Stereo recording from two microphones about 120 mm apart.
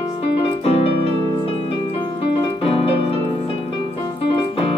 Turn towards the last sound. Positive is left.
turn(degrees=50)  # may be behind; listen again after turning